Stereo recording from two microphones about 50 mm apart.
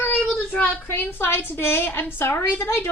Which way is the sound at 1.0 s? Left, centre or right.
Left.